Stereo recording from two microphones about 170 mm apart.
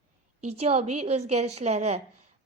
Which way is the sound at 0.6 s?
40° right (ahead or behind).